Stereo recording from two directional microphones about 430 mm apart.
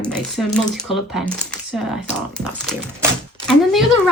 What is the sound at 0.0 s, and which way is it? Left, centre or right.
A woman's voice, centre.